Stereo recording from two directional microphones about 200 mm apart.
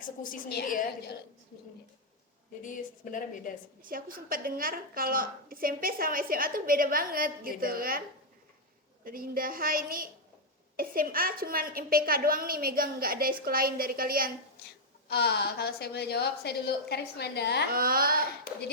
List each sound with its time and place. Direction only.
0.0 s a woman's voice: 45° left (ahead or behind)
2.6 s a woman's voice: 40° left (ahead or behind)
3.8 s a woman's voice: 45° right (ahead or behind)
9.0 s a woman's voice: 45° right (ahead or behind)
15.1 s a woman's voice: 55° left (ahead or behind)
17.7 s a woman's voice: 45° right (ahead or behind)